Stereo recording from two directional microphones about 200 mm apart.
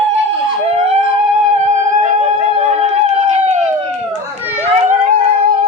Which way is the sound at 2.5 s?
35° right (ahead or behind).